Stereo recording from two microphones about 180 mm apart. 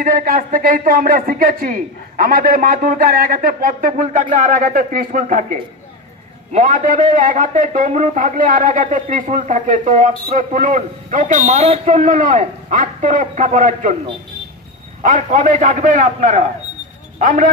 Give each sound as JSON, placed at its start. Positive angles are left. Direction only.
{"t": 0.0, "sound": "a man's voice", "side_deg": -50}
{"t": 15.0, "sound": "a man's voice", "side_deg": -45}